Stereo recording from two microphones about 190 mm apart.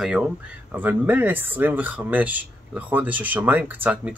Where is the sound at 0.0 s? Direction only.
5° right (ahead or behind).